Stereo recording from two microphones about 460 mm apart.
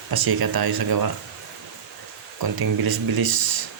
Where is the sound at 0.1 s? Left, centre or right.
Right.